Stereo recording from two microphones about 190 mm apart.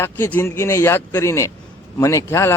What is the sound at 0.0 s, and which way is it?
Speech, 15° left (ahead or behind).